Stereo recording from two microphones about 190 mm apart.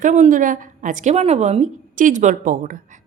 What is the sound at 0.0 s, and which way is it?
A woman's voice, 40° right (ahead or behind).